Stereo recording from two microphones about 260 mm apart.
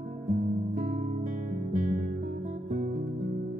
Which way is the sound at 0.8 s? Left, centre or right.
Right.